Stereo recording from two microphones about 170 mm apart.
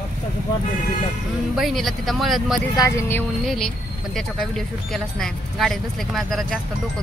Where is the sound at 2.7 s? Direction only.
20° left (ahead or behind).